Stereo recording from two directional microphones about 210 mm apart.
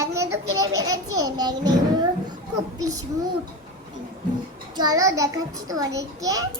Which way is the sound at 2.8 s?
15° right (ahead or behind).